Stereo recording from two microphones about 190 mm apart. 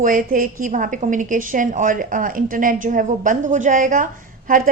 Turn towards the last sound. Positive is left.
turn(degrees=-45)  # may be behind; listen again after turning